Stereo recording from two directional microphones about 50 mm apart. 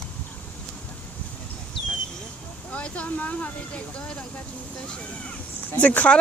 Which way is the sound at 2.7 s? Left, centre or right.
Left.